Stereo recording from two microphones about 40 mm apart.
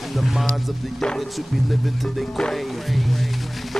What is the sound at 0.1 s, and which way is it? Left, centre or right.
Speech, centre.